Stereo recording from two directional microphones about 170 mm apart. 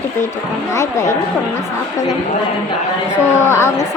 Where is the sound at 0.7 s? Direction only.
15° left (ahead or behind).